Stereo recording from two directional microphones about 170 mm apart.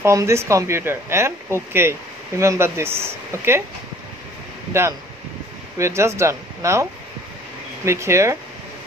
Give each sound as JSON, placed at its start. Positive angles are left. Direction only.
{"t": 0.0, "sound": "speech", "side_deg": -15}
{"t": 4.7, "sound": "speech", "side_deg": -15}